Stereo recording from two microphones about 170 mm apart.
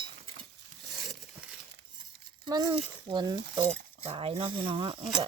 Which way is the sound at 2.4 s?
25° right (ahead or behind).